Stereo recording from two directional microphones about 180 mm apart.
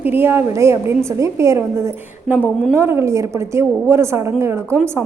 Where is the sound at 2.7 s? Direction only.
15° right (ahead or behind).